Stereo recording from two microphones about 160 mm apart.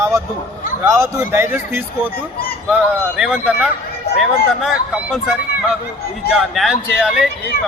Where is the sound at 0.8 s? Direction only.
15° right (ahead or behind).